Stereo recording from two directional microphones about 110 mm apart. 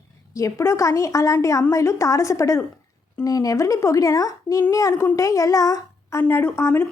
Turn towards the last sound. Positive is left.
turn(degrees=20)  # may be behind; listen again after turning